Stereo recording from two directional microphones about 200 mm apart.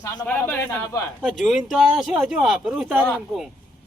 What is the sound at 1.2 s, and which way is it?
Speech, centre (ahead or behind).